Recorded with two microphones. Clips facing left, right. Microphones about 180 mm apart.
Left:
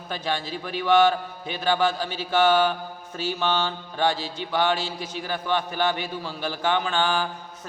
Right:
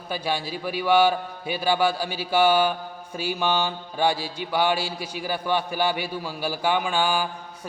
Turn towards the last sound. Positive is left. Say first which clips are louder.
# right 1 dB
turn(degrees=-10)  # may be behind; listen again after turning